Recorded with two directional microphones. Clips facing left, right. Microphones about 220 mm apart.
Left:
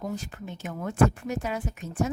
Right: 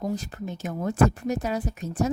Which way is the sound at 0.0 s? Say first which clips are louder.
Right 4 dB; 40° right (ahead or behind).